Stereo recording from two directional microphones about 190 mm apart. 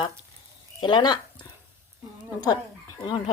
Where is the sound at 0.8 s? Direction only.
25° left (ahead or behind).